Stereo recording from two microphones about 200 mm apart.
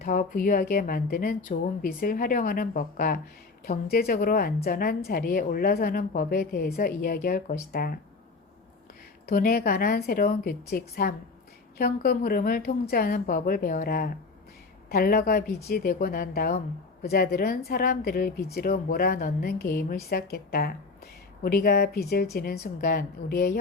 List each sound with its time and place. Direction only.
0.0 s a woman's voice: 45° left (ahead or behind)
9.2 s a woman's voice: 50° left (ahead or behind)